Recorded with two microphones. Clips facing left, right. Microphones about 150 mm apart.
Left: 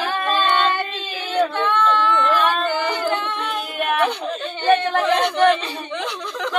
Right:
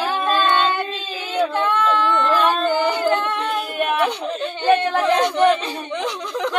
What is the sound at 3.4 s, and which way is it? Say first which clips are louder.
Speech: right 3 dB; 5° right (ahead or behind).